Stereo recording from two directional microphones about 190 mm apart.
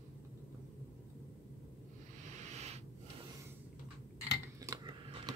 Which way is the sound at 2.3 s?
35° right (ahead or behind).